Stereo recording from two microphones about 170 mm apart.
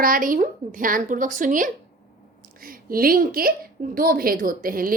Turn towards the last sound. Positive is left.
turn(degrees=-55)  # may be behind; listen again after turning